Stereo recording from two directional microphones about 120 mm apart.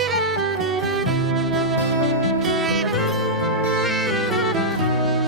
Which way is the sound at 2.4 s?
Centre (ahead or behind).